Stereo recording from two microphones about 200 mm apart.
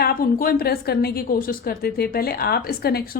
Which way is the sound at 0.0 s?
45° left (ahead or behind).